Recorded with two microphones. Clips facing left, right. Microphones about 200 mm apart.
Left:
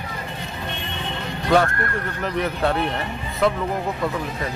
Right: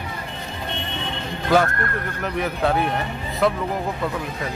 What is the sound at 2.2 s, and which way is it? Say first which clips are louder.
Speech: even; centre (ahead or behind).